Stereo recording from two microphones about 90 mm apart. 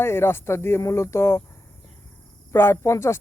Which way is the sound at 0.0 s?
25° left (ahead or behind).